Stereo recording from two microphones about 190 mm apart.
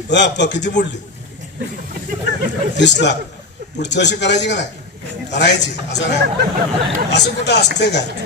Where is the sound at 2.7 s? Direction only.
65° left (ahead or behind).